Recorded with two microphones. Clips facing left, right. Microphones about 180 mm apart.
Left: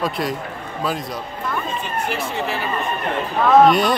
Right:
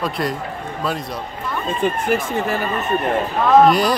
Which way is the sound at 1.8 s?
50° right (ahead or behind).